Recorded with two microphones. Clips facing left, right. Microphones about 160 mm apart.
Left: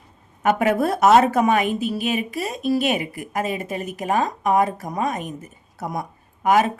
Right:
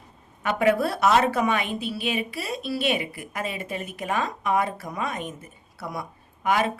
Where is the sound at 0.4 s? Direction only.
45° left (ahead or behind).